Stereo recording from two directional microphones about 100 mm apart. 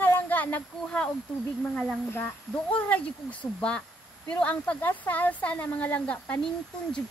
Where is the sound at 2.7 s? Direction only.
15° left (ahead or behind).